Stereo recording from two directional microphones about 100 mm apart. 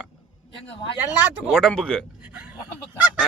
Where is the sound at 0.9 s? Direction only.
15° right (ahead or behind).